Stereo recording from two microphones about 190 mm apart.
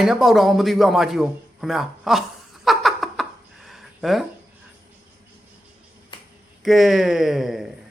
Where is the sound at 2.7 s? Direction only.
Centre (ahead or behind).